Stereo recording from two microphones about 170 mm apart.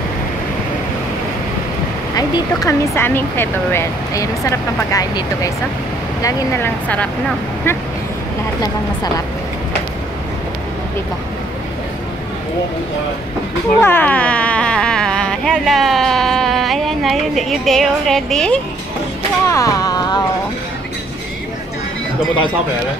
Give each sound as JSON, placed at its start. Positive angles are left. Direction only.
{"t": 2.1, "sound": "speech", "side_deg": 20}
{"t": 13.7, "sound": "speech", "side_deg": 10}
{"t": 19.4, "sound": "a sound", "side_deg": 20}